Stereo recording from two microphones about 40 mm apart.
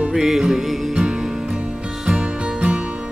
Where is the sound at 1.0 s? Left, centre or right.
Centre.